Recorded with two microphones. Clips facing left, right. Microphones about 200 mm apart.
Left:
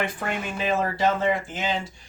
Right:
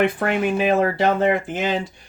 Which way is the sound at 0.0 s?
60° right (ahead or behind).